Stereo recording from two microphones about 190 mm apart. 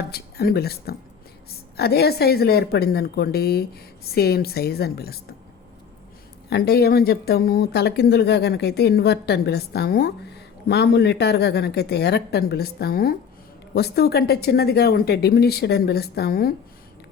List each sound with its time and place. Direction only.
0.1 s speech: 55° left (ahead or behind)
6.5 s speech: 55° left (ahead or behind)